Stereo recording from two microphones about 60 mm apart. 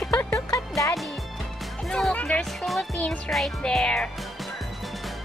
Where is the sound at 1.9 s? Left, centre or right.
Centre.